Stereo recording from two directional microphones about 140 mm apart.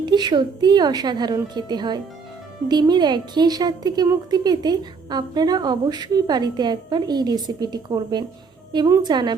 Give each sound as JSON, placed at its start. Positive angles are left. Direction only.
{"t": 0.0, "sound": "a woman's voice", "side_deg": -30}